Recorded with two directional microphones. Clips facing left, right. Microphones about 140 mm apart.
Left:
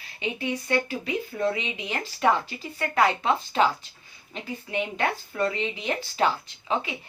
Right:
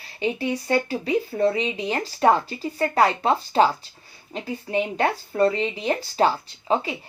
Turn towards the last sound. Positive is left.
turn(degrees=-35)  # may be behind; listen again after turning